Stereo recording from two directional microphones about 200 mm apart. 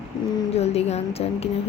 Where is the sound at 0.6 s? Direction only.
30° left (ahead or behind).